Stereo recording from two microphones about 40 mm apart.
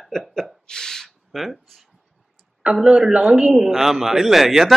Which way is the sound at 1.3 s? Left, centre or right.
Centre.